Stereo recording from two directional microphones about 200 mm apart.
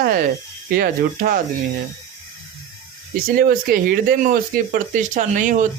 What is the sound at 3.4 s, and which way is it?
Speech, 45° right (ahead or behind).